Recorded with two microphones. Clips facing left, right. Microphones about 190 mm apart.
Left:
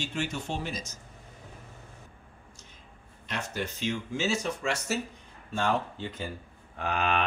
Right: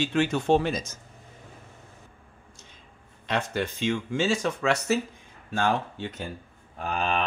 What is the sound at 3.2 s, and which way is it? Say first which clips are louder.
Speech: right 6 dB; 90° right.